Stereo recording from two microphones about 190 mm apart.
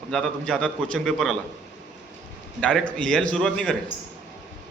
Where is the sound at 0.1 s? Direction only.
5° left (ahead or behind).